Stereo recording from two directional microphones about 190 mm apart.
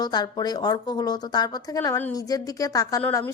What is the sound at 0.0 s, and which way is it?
A woman's voice, 20° left (ahead or behind).